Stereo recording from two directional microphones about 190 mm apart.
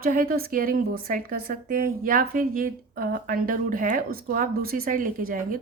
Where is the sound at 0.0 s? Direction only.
50° right (ahead or behind).